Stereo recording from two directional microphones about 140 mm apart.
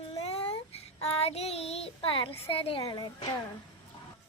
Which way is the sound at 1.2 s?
45° left (ahead or behind).